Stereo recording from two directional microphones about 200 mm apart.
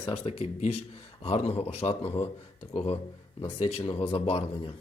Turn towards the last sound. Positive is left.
turn(degrees=25)  # may be behind; listen again after turning